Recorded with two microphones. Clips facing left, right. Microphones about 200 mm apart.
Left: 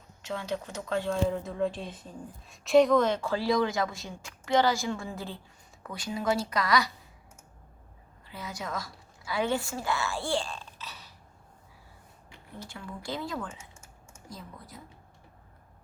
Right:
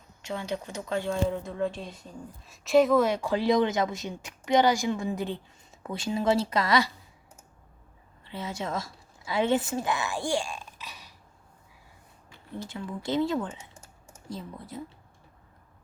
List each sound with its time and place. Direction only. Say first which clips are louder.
0.9 s speech: even; centre (ahead or behind); by 6.9 s 25° right (ahead or behind)
8.2 s a woman's voice: right 5 dB; 25° right (ahead or behind)
12.6 s speech: right 5 dB; 20° right (ahead or behind)
13.7 s typing: right 2 dB; 35° right (ahead or behind)